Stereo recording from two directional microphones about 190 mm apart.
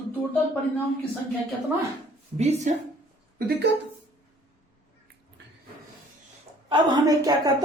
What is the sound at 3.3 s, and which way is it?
Speech, 55° right (ahead or behind).